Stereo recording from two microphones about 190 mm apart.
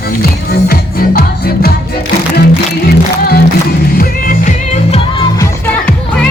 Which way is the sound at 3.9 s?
45° left (ahead or behind).